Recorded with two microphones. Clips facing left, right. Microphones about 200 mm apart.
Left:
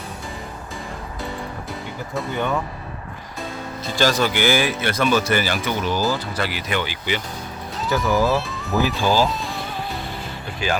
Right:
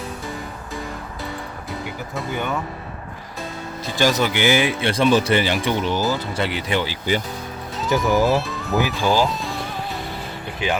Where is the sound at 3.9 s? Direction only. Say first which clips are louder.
Even; 15° right (ahead or behind); by 7.2 s 35° right (ahead or behind).